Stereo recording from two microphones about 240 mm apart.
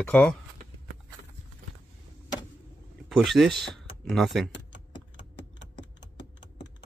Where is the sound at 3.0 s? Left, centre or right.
Centre.